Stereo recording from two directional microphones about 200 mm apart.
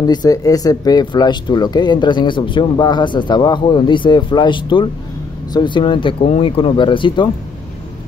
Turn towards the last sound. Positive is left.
turn(degrees=25)  # may be behind; listen again after turning